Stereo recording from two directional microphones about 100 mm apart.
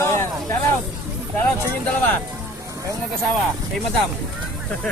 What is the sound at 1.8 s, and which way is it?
Speech, 20° left (ahead or behind).